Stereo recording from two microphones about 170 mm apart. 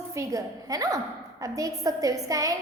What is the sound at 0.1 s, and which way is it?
Child singing, 20° right (ahead or behind).